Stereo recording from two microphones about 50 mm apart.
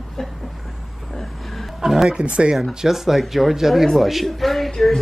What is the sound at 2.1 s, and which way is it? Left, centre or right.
Speech, right.